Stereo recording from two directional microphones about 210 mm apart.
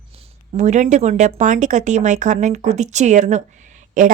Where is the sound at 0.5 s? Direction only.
35° right (ahead or behind).